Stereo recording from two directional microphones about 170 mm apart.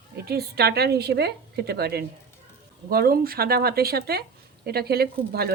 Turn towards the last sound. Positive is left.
turn(degrees=-65)  # may be behind; listen again after turning